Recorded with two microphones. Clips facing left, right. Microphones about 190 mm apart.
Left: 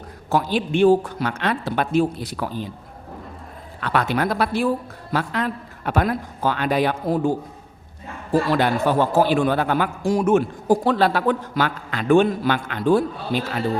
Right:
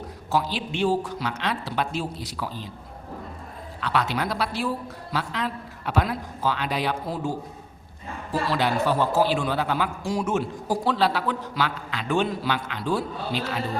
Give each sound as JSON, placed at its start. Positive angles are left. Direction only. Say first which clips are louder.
{"t": 0.3, "sound": "a man's voice", "louder": "left 5 dB", "side_deg": 55}
{"t": 3.8, "sound": "a man's voice", "louder": "left 4 dB", "side_deg": 50}